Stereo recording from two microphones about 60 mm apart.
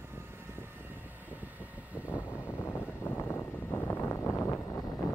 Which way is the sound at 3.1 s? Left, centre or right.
Left.